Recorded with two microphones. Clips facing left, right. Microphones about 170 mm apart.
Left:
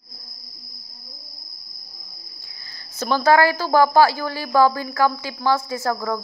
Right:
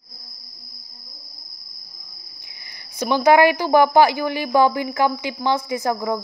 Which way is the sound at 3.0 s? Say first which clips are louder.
Right 2 dB; 15° right (ahead or behind).